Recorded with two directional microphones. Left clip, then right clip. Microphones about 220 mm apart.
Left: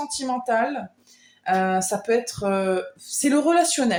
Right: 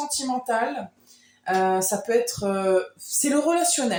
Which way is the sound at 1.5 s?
40° left (ahead or behind).